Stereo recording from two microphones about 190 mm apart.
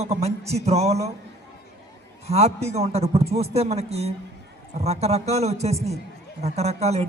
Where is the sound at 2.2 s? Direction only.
35° right (ahead or behind).